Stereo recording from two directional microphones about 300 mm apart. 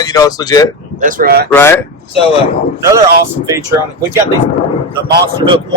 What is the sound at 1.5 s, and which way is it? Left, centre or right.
Speech, centre.